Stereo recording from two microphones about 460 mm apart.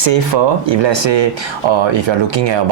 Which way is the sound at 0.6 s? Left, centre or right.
Right.